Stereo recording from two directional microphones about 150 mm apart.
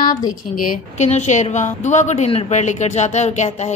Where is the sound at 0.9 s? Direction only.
50° left (ahead or behind).